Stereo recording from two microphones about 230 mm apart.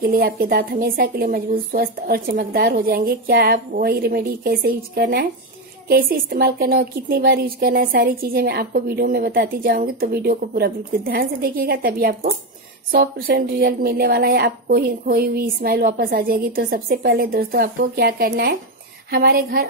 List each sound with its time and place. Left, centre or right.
0.0 s a woman's voice: right